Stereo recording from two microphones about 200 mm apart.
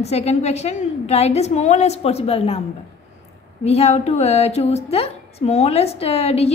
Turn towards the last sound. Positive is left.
turn(degrees=30)  # may be behind; listen again after turning